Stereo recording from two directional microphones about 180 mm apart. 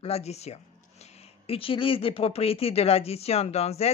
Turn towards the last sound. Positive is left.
turn(degrees=35)  # may be behind; listen again after turning